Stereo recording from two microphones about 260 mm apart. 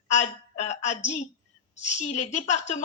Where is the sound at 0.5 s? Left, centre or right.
Left.